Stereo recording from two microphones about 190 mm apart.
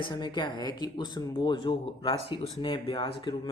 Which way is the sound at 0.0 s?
25° left (ahead or behind).